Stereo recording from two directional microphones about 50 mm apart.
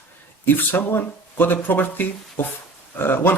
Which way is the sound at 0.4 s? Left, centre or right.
Left.